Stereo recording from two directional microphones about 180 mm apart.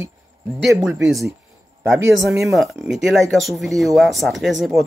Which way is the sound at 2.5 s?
Centre (ahead or behind).